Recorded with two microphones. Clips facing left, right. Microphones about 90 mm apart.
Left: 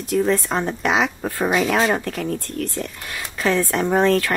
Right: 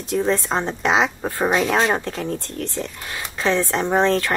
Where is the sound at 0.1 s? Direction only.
25° right (ahead or behind).